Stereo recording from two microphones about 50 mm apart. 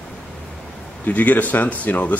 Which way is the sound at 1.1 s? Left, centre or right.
Left.